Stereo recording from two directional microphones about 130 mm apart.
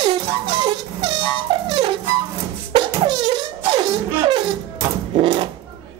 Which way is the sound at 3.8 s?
40° right (ahead or behind).